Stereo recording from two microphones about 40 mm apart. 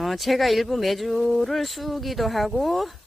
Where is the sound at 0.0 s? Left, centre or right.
Centre.